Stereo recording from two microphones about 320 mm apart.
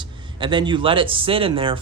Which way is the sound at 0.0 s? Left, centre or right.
Centre.